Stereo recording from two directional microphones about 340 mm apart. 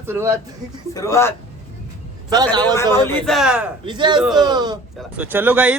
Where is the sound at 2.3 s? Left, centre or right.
Centre.